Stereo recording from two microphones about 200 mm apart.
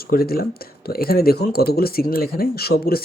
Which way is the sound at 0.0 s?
50° left (ahead or behind).